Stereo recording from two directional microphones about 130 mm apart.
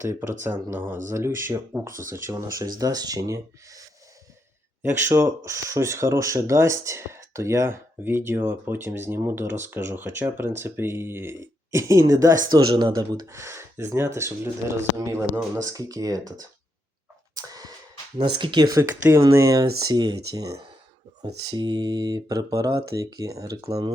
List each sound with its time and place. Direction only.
0.0 s speech: 20° right (ahead or behind)
17.3 s a sound: 30° right (ahead or behind)
18.3 s speech: 35° right (ahead or behind)
18.8 s speech: 20° right (ahead or behind)